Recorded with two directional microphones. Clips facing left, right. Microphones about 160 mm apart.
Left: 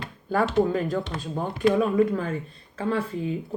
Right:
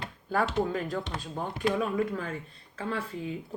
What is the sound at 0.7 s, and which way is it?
Speech, 35° left (ahead or behind).